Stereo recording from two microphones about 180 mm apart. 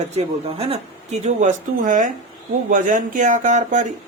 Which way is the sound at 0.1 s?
35° right (ahead or behind).